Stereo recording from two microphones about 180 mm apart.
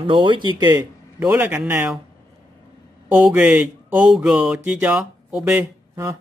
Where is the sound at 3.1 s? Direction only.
5° right (ahead or behind).